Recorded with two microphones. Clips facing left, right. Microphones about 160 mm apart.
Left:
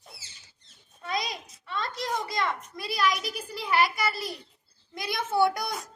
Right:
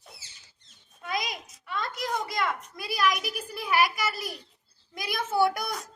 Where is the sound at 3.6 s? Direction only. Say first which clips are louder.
Even; 5° right (ahead or behind).